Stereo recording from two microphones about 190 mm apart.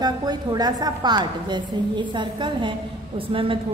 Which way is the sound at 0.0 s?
20° right (ahead or behind).